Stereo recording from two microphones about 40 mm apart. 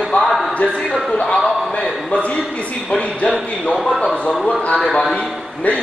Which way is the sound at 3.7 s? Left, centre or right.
Centre.